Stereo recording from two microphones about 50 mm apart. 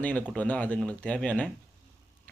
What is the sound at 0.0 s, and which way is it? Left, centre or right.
Speech, left.